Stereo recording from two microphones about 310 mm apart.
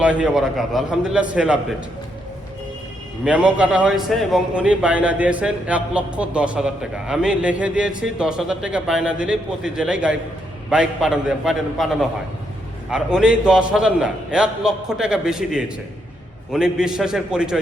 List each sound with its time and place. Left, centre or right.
0.0 s a man's voice: centre
3.2 s a man's voice: centre